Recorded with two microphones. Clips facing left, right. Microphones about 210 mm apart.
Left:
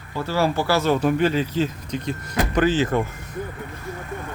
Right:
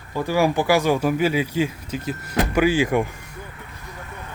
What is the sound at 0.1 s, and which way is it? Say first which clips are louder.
Speech: right 2 dB; 15° right (ahead or behind).